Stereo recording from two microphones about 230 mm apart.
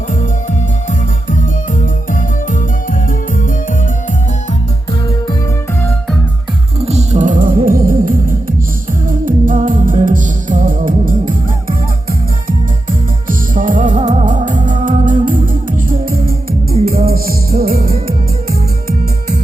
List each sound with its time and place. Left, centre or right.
0.9 s music: left
6.8 s music: right
13.2 s music: right